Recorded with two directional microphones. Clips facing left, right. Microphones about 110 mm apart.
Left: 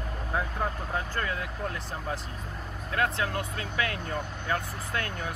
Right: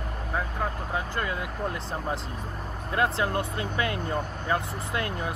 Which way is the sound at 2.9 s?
25° right (ahead or behind).